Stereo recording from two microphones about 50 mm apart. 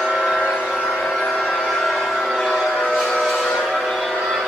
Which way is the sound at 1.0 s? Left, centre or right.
Centre.